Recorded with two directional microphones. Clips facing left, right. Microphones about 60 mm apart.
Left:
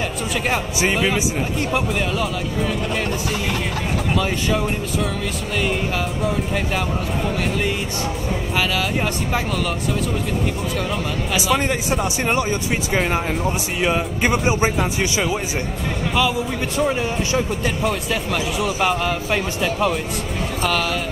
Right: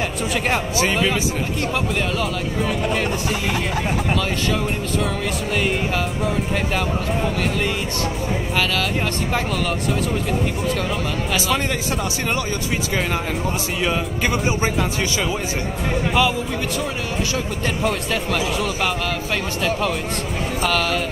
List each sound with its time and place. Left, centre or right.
0.9 s speech: centre
4.2 s speech: centre
5.5 s speech: centre
11.3 s speech: centre
16.1 s speech: centre
16.7 s speech: left
17.6 s speech: centre